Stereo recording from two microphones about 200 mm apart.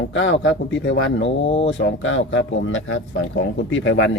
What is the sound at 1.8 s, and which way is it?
Speech, 75° left (ahead or behind).